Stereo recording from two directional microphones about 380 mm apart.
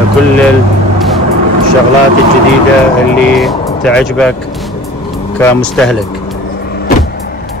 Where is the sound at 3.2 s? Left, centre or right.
Centre.